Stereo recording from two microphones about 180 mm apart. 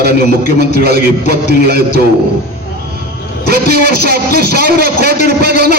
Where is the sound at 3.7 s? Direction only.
60° right (ahead or behind).